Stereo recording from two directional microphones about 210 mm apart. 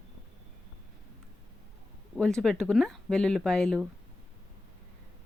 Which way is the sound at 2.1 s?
5° left (ahead or behind).